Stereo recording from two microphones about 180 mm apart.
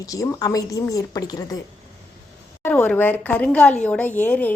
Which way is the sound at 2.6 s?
10° left (ahead or behind).